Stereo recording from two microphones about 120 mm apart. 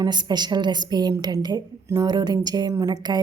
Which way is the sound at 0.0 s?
35° right (ahead or behind).